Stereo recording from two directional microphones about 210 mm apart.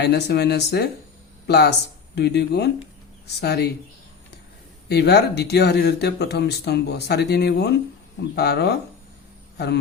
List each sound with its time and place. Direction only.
0.0 s speech: 50° left (ahead or behind)
4.9 s speech: 50° left (ahead or behind)